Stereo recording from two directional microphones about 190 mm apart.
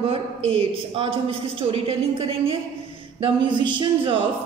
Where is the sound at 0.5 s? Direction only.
30° right (ahead or behind).